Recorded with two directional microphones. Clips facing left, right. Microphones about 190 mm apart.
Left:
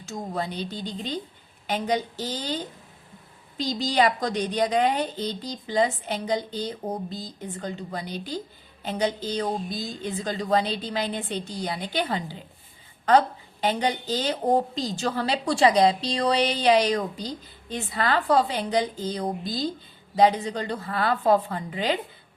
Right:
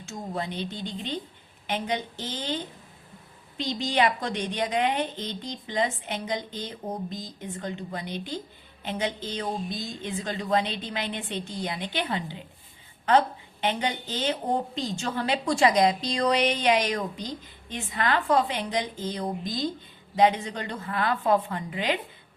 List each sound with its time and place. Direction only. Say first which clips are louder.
0.0 s a woman's voice: left 2 dB; 40° left (ahead or behind)